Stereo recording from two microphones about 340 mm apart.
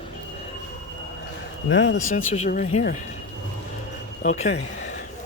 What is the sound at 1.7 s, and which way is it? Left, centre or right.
Speech, left.